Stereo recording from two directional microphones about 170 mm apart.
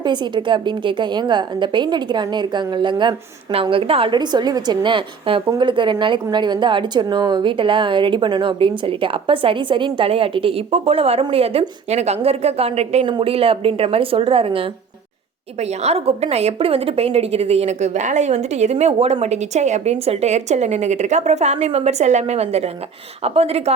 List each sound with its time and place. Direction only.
0.0 s a woman's voice: 25° right (ahead or behind)